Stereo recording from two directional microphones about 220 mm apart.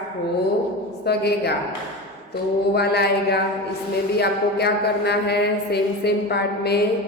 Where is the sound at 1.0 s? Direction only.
50° left (ahead or behind).